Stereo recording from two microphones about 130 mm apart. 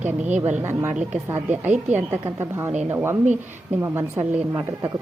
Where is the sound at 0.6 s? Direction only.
20° right (ahead or behind).